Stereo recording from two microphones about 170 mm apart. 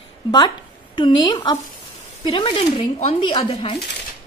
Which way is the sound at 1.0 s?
25° left (ahead or behind).